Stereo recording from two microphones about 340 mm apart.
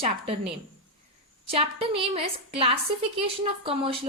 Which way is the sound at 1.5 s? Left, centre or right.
Centre.